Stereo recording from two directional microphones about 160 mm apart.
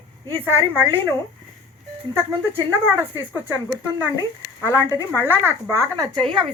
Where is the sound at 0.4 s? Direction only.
15° right (ahead or behind).